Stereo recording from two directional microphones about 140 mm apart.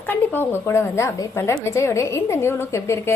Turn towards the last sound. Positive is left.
turn(degrees=20)  # may be behind; listen again after turning